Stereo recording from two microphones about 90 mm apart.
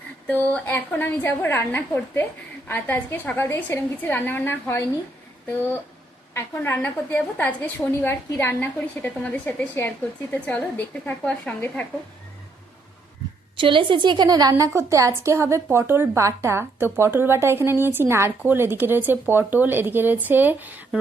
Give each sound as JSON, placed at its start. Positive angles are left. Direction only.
{"t": 0.3, "sound": "a woman's voice", "side_deg": 15}
{"t": 6.3, "sound": "a woman's voice", "side_deg": 25}
{"t": 13.6, "sound": "a woman's voice", "side_deg": -70}
{"t": 14.6, "sound": "speech", "side_deg": -35}